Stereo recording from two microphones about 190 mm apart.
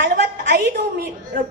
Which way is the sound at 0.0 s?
65° right (ahead or behind).